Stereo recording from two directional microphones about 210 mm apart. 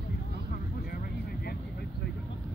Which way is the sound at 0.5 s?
45° left (ahead or behind).